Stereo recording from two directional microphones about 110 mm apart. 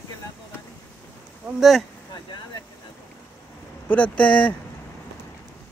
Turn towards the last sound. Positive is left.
turn(degrees=15)  # may be behind; listen again after turning